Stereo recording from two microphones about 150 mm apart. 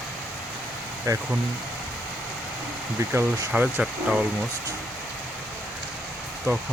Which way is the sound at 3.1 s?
15° right (ahead or behind).